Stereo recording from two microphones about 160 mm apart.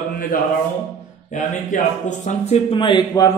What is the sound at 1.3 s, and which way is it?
Speech, 50° left (ahead or behind).